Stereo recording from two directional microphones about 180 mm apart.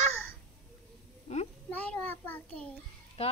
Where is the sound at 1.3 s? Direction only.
35° left (ahead or behind).